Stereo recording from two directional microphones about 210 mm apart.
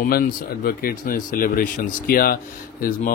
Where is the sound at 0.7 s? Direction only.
45° left (ahead or behind).